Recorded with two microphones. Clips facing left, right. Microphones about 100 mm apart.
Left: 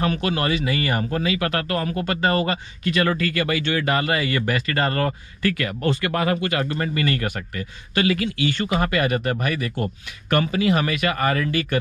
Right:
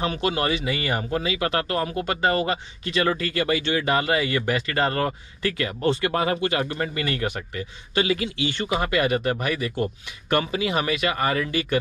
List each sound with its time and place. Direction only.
0.0 s speech: 20° right (ahead or behind)